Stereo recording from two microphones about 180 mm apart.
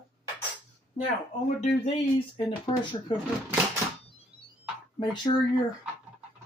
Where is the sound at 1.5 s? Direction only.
40° left (ahead or behind).